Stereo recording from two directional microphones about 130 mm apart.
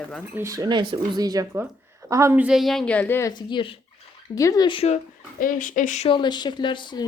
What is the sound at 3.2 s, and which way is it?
Speech, 30° left (ahead or behind).